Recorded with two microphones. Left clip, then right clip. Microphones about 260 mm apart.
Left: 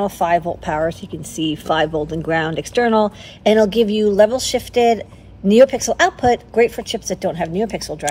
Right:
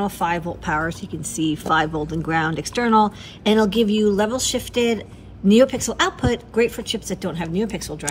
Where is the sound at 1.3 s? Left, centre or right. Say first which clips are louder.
Left 1 dB; left.